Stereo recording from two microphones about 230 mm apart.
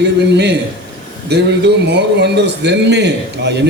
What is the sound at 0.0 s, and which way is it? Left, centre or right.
A man's voice, right.